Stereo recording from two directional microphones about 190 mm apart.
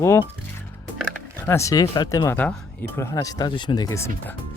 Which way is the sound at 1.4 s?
15° left (ahead or behind).